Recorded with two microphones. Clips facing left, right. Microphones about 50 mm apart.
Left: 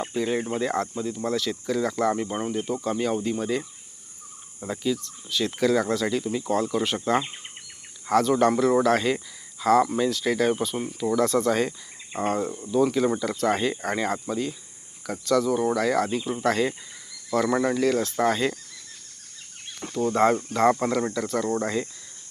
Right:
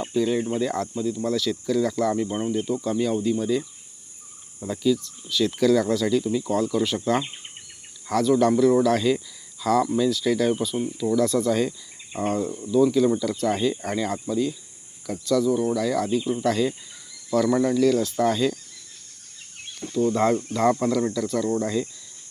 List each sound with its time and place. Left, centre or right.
0.0 s speech: left
4.6 s speech: left
8.2 s speech: left
13.3 s speech: left
19.8 s speech: left
20.1 s speech: left